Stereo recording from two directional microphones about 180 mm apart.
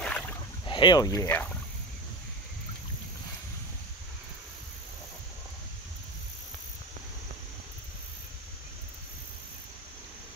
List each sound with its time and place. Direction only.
0.0 s boat: 5° left (ahead or behind)
0.7 s speech: 25° left (ahead or behind)